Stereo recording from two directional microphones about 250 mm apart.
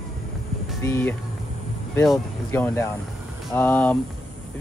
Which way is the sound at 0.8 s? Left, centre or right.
Centre.